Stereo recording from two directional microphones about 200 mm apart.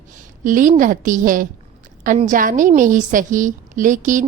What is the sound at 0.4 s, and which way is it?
A woman's voice, 40° right (ahead or behind).